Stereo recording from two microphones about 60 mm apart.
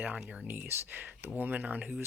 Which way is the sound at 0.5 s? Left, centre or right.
Right.